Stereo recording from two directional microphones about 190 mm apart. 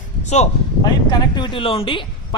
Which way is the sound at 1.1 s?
25° left (ahead or behind).